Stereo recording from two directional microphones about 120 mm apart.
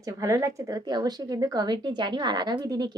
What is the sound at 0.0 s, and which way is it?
Speech, 30° right (ahead or behind).